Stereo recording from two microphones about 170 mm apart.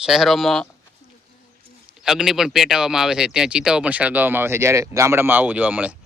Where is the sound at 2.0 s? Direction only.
5° right (ahead or behind).